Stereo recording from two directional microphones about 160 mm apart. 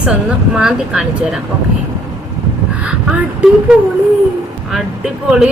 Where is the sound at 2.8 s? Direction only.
5° right (ahead or behind).